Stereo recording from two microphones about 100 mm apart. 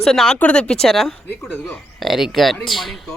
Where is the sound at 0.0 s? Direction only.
5° left (ahead or behind).